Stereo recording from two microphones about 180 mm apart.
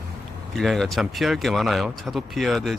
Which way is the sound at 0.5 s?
Centre (ahead or behind).